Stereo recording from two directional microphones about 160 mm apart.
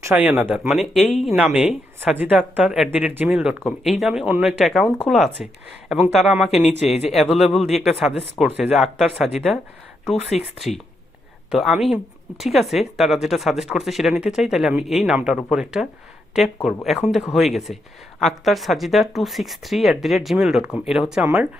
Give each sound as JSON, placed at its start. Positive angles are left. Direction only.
{"t": 0.0, "sound": "speech", "side_deg": -10}
{"t": 10.3, "sound": "speech", "side_deg": 45}
{"t": 11.5, "sound": "speech", "side_deg": 0}